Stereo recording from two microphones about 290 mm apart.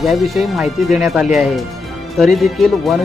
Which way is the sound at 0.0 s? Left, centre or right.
Centre.